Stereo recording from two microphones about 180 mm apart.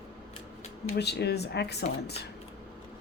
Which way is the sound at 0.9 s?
65° left (ahead or behind).